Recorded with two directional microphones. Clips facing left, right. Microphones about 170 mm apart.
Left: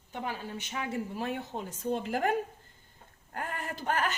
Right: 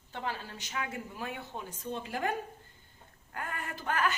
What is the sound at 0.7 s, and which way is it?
Speech, 30° left (ahead or behind).